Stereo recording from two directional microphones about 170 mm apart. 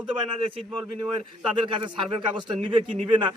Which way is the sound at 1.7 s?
30° right (ahead or behind).